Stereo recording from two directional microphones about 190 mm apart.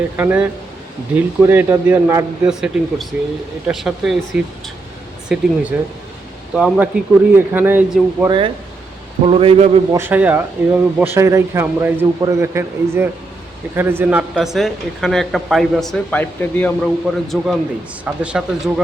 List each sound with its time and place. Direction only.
0.2 s speech: 10° right (ahead or behind)
5.7 s speech: 5° right (ahead or behind)
8.3 s a man's voice: 25° right (ahead or behind)
9.9 s speech: 10° right (ahead or behind)